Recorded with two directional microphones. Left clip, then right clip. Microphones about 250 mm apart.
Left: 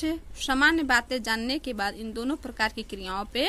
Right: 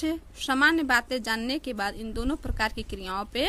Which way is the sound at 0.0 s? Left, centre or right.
Centre.